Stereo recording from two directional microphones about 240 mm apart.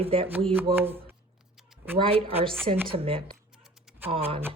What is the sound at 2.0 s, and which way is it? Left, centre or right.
Speech, right.